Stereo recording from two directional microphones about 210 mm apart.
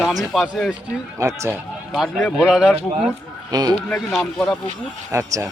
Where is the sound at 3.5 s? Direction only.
20° right (ahead or behind).